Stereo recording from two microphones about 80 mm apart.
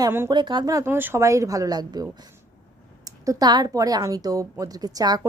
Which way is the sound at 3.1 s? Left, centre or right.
Right.